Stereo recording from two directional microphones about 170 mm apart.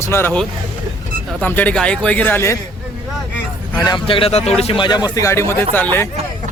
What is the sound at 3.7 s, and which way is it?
Speech, 25° left (ahead or behind).